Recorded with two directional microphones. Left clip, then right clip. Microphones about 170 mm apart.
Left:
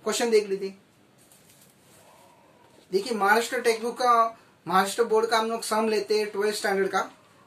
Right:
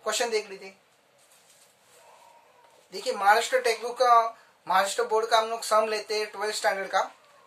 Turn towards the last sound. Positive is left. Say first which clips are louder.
# left 1 dB
turn(degrees=-20)  # may be behind; listen again after turning